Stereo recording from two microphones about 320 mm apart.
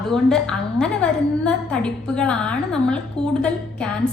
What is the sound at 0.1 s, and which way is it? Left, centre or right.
A woman's voice, centre.